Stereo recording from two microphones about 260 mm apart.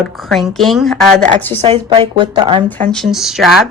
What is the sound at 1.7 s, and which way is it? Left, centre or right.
Speech, centre.